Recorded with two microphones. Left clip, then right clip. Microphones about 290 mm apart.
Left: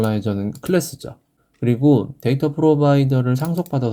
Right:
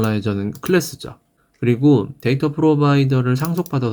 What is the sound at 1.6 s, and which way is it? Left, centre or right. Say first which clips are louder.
Speech: right 1 dB; left.